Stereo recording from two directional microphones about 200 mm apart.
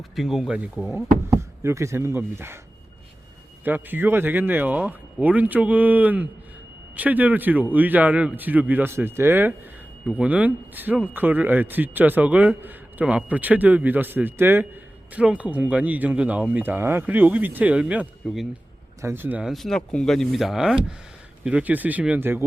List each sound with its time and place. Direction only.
0.2 s speech: centre (ahead or behind)
3.6 s speech: 10° right (ahead or behind)